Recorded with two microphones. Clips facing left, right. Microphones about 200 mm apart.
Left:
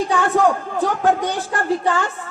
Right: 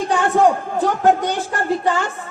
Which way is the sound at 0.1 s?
15° right (ahead or behind).